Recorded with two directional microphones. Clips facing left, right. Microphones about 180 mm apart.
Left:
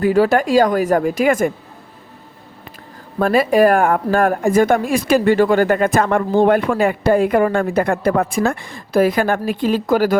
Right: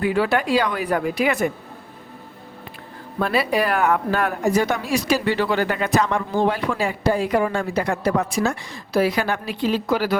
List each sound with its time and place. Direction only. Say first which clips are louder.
0.0 s speech: left 6 dB; 40° left (ahead or behind)
3.2 s speech: left 7 dB; 45° left (ahead or behind)